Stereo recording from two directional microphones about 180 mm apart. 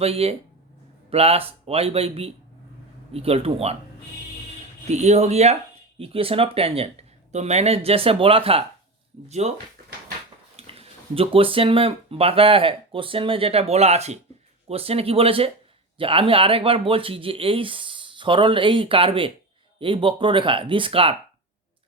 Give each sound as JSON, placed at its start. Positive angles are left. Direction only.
{"t": 0.0, "sound": "speech", "side_deg": -35}
{"t": 4.9, "sound": "speech", "side_deg": -40}
{"t": 10.6, "sound": "speech", "side_deg": -35}